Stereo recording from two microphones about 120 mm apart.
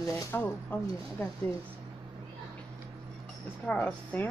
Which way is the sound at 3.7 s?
10° left (ahead or behind).